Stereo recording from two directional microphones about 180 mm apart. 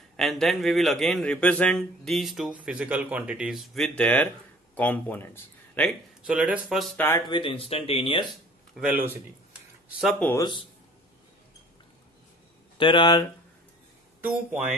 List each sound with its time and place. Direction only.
0.2 s a man's voice: centre (ahead or behind)
6.2 s a man's voice: 5° right (ahead or behind)
7.0 s speech: 10° left (ahead or behind)
7.2 s speech: 25° left (ahead or behind)
8.7 s a man's voice: 5° right (ahead or behind)
10.2 s speech: 20° left (ahead or behind)
12.7 s speech: 25° left (ahead or behind)